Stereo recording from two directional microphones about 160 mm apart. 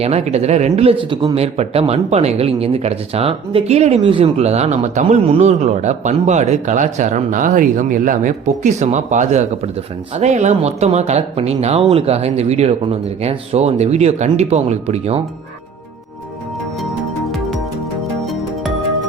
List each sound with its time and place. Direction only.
0.0 s speech: 40° right (ahead or behind)